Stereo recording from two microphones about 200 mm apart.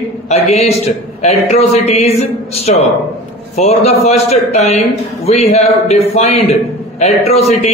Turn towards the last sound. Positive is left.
turn(degrees=30)  # may be behind; listen again after turning